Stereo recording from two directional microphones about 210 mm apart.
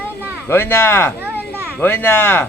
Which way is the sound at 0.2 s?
10° right (ahead or behind).